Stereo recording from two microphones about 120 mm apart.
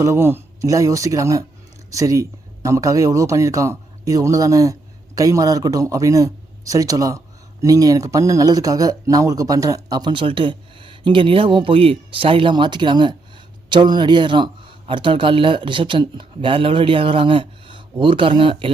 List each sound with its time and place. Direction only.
0.0 s a man's voice: 20° right (ahead or behind); by 18.7 s 45° right (ahead or behind)